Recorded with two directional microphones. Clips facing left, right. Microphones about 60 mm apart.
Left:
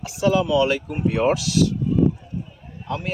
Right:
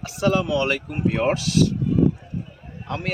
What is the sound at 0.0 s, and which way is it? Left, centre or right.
Speech, right.